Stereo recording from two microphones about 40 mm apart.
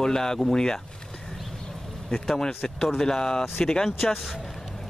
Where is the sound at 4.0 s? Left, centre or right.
Centre.